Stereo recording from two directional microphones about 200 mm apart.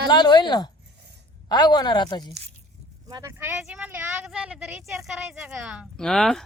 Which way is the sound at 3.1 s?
15° right (ahead or behind).